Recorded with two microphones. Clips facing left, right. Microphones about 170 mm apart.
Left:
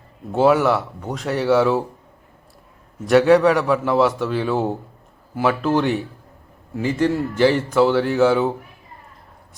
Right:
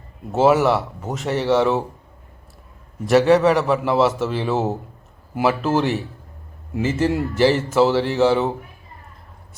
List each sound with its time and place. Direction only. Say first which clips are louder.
0.3 s a man's voice: even; centre (ahead or behind)
3.1 s a man's voice: left 1 dB; centre (ahead or behind)